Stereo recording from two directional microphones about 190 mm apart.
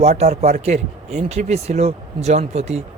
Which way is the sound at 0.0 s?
35° right (ahead or behind).